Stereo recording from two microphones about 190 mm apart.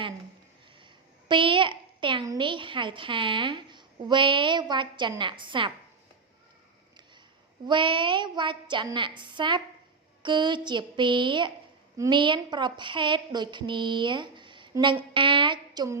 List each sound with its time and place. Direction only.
1.3 s a woman's voice: 25° right (ahead or behind)
7.7 s a woman's voice: 25° right (ahead or behind)